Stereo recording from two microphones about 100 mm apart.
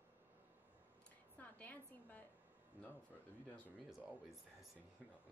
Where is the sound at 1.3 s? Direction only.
15° left (ahead or behind).